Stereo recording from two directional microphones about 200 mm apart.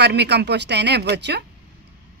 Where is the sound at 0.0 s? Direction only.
55° right (ahead or behind).